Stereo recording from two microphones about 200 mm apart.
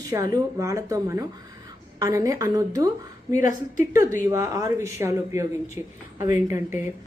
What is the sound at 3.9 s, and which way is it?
Speech, 15° right (ahead or behind).